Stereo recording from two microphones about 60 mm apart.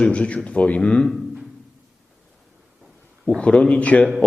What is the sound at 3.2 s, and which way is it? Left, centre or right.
Speech, centre.